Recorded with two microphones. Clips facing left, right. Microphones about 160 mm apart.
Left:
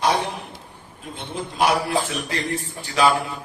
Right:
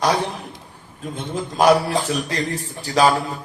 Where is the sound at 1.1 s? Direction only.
40° right (ahead or behind).